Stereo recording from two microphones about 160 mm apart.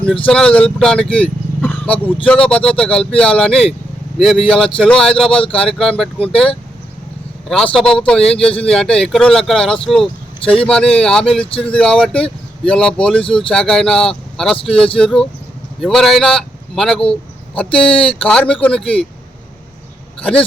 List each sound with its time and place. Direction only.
0.3 s speech: 5° left (ahead or behind)
7.4 s speech: 5° left (ahead or behind)
13.2 s speech: 35° left (ahead or behind)
13.5 s speech: 5° left (ahead or behind)